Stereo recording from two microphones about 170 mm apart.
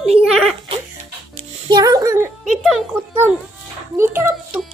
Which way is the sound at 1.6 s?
25° right (ahead or behind).